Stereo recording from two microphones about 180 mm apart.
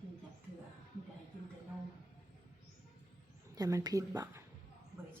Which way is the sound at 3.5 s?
20° right (ahead or behind).